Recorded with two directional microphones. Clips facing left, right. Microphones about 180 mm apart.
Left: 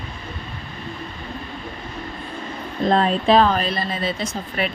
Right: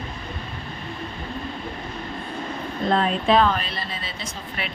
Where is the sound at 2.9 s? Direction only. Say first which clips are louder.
Left 3 dB; 35° left (ahead or behind).